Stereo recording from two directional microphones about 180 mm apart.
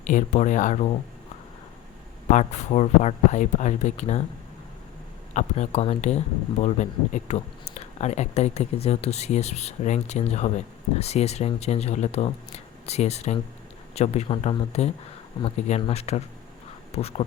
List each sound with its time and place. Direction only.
0.1 s speech: 45° left (ahead or behind)
2.3 s speech: 40° left (ahead or behind)
5.3 s speech: 40° left (ahead or behind)